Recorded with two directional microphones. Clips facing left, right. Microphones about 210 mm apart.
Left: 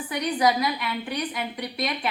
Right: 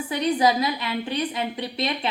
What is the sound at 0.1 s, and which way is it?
A woman's voice, 25° right (ahead or behind).